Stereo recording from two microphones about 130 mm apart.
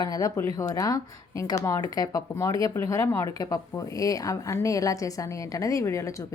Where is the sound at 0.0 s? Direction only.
30° left (ahead or behind).